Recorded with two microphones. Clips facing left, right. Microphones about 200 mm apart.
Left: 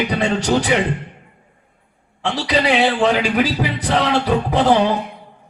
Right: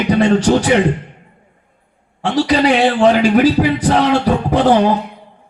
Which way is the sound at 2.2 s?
45° right (ahead or behind).